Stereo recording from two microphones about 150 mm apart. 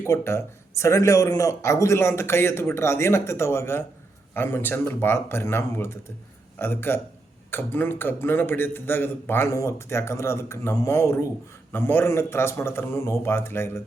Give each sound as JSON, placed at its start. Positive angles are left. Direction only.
{"t": 0.0, "sound": "speech", "side_deg": 15}